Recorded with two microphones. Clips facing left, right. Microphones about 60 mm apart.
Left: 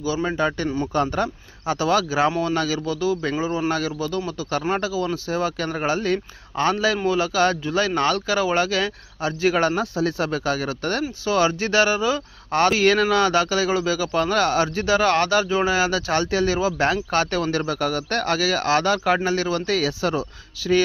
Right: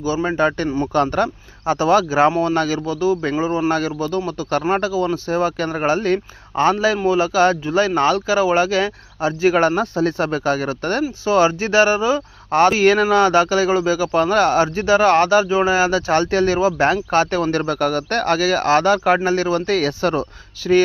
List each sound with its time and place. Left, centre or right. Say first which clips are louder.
0.0 s speech: right 4 dB; right
0.9 s speech: right 5 dB; right
1.6 s speech: right 5 dB; right
17.5 s speech: right 4 dB; right
20.0 s speech: right 4 dB; right